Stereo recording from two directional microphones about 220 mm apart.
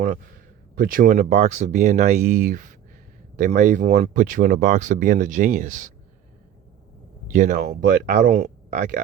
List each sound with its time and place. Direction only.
0.8 s speech: 40° right (ahead or behind)
7.3 s speech: 35° right (ahead or behind)